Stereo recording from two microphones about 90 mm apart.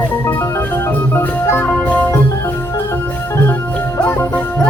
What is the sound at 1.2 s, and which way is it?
Music, 25° left (ahead or behind).